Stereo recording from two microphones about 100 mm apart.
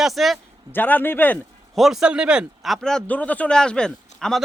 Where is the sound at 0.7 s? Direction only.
20° left (ahead or behind).